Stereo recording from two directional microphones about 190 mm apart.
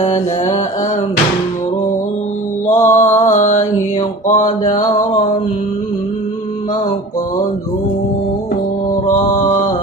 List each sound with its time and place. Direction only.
2.7 s mantra: 15° left (ahead or behind)
3.0 s mantra: 40° left (ahead or behind)
4.3 s a sound: 40° left (ahead or behind)